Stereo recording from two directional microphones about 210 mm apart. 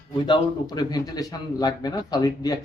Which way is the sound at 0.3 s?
20° left (ahead or behind).